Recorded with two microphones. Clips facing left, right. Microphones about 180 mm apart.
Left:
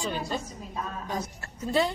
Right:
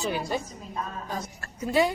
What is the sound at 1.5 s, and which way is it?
Speech, 10° right (ahead or behind).